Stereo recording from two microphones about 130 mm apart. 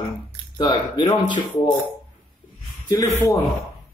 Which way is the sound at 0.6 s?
35° left (ahead or behind).